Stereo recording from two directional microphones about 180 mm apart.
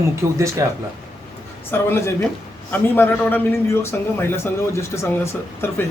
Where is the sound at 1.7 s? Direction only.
10° left (ahead or behind).